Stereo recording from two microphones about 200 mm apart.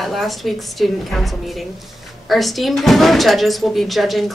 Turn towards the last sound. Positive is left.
turn(degrees=0)  # may be behind; listen again after turning